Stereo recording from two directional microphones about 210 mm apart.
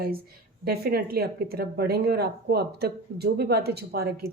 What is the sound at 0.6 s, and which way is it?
Speech, 45° right (ahead or behind).